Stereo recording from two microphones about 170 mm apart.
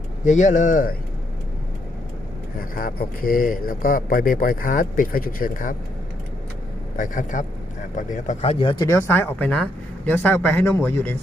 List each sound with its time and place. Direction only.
0.3 s speech: 45° left (ahead or behind)
2.6 s speech: 55° left (ahead or behind)
6.9 s speech: 50° left (ahead or behind); by 9.0 s 25° left (ahead or behind)
9.0 s a man's voice: 10° left (ahead or behind)